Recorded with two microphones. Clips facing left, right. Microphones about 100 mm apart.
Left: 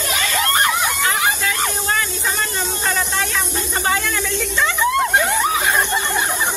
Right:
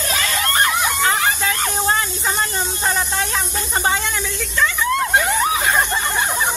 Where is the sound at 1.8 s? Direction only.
25° right (ahead or behind).